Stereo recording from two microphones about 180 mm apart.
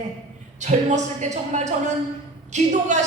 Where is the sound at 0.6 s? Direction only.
40° right (ahead or behind).